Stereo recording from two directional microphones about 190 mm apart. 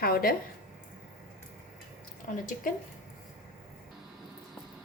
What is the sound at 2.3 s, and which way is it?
Speech, 45° left (ahead or behind).